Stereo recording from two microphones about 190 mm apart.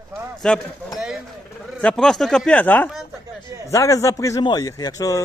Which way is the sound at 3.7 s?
15° left (ahead or behind).